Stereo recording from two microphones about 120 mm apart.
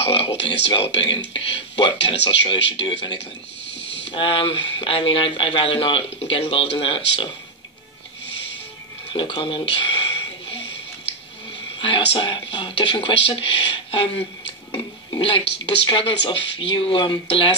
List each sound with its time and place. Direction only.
0.0 s speech: 50° left (ahead or behind)
9.1 s a sound: 45° left (ahead or behind)
11.8 s speech: 45° left (ahead or behind)